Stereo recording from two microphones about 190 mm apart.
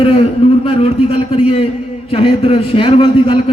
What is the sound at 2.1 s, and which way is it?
A man's voice, 30° left (ahead or behind).